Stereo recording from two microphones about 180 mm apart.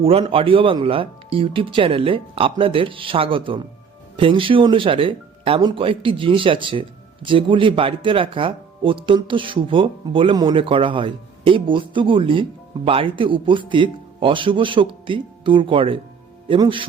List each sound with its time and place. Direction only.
0.0 s speech: 30° right (ahead or behind)